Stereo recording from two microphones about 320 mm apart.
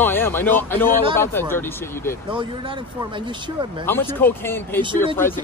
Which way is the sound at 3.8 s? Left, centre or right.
Centre.